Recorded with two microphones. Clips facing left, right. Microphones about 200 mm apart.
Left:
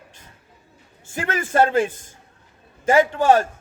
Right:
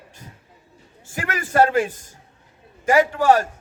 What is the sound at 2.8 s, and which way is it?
Speech, 25° left (ahead or behind).